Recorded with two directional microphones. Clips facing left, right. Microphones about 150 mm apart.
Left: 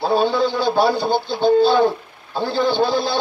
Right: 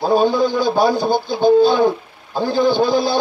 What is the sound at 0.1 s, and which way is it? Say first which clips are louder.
A man's voice: right 4 dB; 15° right (ahead or behind).